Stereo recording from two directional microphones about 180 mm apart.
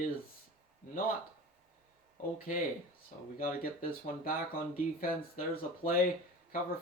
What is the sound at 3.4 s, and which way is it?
Speech, 50° left (ahead or behind).